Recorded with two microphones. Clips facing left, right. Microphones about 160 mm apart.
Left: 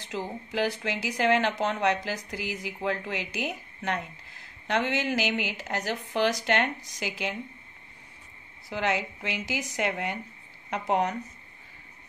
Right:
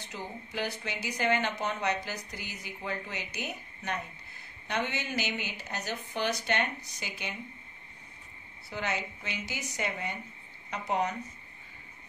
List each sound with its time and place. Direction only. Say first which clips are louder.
0.1 s speech: left 7 dB; 90° left
8.6 s speech: left 6 dB; 90° left
10.7 s speech: left 4 dB; 75° left (ahead or behind)